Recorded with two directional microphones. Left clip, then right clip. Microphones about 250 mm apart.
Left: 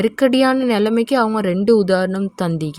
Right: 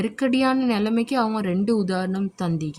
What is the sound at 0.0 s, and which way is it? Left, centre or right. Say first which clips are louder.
A woman's voice: left 7 dB; centre.